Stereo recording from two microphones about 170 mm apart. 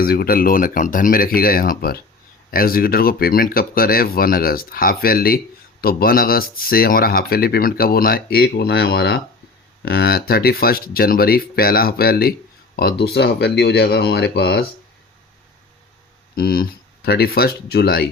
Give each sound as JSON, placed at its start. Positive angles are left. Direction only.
{"t": 0.0, "sound": "speech", "side_deg": 60}
{"t": 16.3, "sound": "speech", "side_deg": 65}